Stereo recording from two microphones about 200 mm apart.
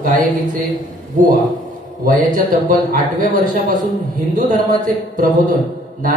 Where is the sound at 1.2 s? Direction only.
40° right (ahead or behind).